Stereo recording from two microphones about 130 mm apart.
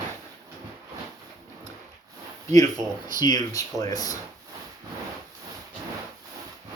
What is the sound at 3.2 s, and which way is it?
Speech, 30° left (ahead or behind).